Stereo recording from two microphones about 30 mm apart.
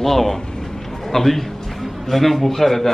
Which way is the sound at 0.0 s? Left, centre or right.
Centre.